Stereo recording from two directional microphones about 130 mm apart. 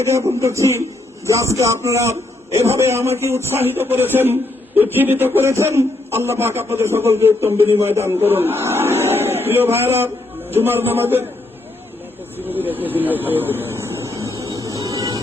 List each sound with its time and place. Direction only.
0.0 s a man's voice: 25° right (ahead or behind)
12.5 s speech: 15° right (ahead or behind)
13.6 s vehicle: 20° right (ahead or behind)
14.5 s a sound: 25° right (ahead or behind)